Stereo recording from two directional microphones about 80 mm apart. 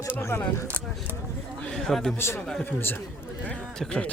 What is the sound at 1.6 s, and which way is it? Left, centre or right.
Speech, centre.